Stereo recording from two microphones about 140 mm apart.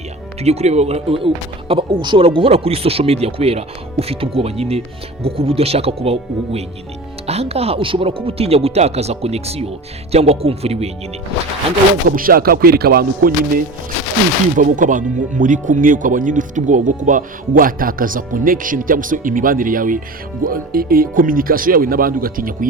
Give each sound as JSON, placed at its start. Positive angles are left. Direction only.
{"t": 0.4, "sound": "speech", "side_deg": -50}
{"t": 12.0, "sound": "speech", "side_deg": -90}
{"t": 14.6, "sound": "speech", "side_deg": -70}
{"t": 20.4, "sound": "speech", "side_deg": -90}